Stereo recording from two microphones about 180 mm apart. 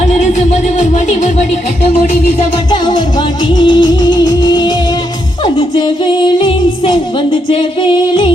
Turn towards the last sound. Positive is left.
turn(degrees=25)  # may be behind; listen again after turning